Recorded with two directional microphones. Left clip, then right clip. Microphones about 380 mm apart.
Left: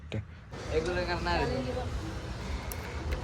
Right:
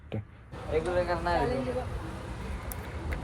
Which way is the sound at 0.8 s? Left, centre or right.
Centre.